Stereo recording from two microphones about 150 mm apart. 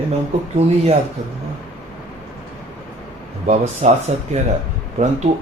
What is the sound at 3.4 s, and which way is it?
Speech, 50° right (ahead or behind).